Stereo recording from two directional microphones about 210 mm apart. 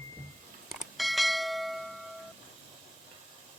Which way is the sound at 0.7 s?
Centre (ahead or behind).